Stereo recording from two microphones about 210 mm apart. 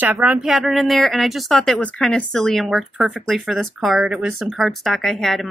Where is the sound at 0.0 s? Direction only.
5° right (ahead or behind).